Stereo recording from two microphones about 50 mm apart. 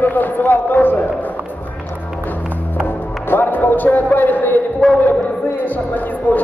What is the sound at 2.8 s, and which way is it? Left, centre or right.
Music, left.